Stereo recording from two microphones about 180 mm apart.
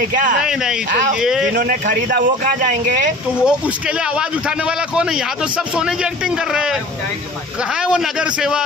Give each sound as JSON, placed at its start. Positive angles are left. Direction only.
{"t": 0.1, "sound": "a man's voice", "side_deg": -50}
{"t": 0.4, "sound": "a man's voice", "side_deg": -5}
{"t": 1.5, "sound": "a man's voice", "side_deg": -50}
{"t": 3.4, "sound": "a man's voice", "side_deg": -5}
{"t": 7.8, "sound": "a man's voice", "side_deg": -5}